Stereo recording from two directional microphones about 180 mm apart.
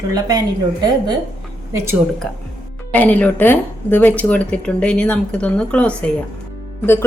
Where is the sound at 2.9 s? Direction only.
10° left (ahead or behind).